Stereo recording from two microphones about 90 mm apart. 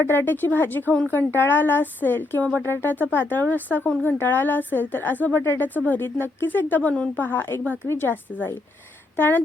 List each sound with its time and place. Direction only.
0.0 s a woman's voice: 25° left (ahead or behind)